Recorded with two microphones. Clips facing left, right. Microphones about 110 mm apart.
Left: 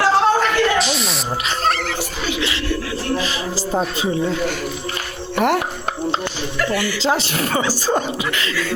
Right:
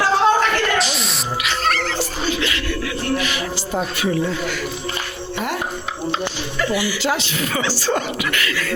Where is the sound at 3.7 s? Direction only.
25° left (ahead or behind).